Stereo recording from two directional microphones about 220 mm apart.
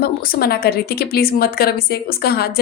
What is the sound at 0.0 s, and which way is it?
A woman's voice, 45° left (ahead or behind).